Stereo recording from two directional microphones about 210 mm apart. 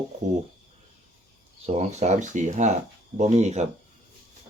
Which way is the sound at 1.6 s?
30° right (ahead or behind).